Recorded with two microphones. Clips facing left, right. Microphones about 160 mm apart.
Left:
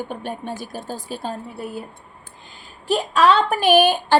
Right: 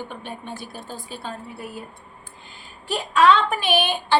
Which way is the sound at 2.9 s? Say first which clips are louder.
Left 1 dB; 40° left (ahead or behind).